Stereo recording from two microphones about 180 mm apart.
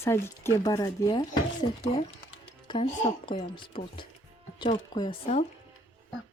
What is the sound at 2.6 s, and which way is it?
Speech, 35° left (ahead or behind).